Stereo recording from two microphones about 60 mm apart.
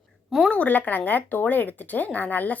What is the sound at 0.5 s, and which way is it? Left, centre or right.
A woman's voice, left.